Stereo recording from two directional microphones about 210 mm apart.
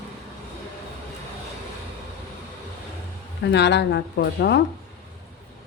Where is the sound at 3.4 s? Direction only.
55° left (ahead or behind).